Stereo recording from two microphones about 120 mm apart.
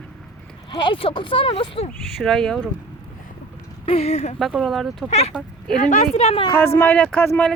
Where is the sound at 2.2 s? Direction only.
5° left (ahead or behind).